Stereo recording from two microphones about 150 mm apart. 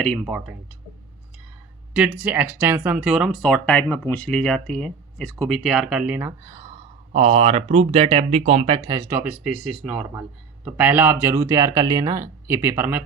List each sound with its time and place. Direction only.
0.0 s speech: 5° left (ahead or behind)
1.9 s speech: 10° right (ahead or behind); by 6.7 s 25° right (ahead or behind)
7.1 s speech: 45° right (ahead or behind)
8.9 s speech: 20° right (ahead or behind)